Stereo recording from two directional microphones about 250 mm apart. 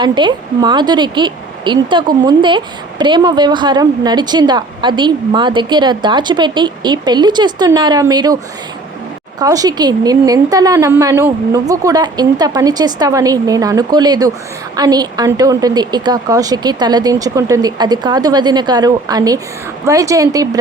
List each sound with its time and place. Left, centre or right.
0.0 s a woman's voice: centre
9.4 s a woman's voice: centre